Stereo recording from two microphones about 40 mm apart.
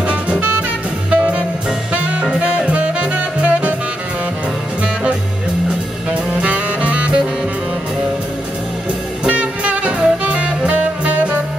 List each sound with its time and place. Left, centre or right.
0.0 s music: right
6.4 s music: right
9.3 s music: right